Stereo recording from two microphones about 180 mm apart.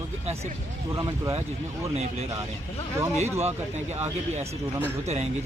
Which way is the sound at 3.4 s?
35° right (ahead or behind).